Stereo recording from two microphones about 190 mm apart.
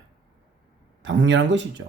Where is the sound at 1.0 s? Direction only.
70° right (ahead or behind).